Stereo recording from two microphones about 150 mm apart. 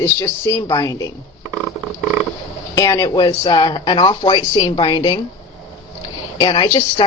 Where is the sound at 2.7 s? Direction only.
25° left (ahead or behind).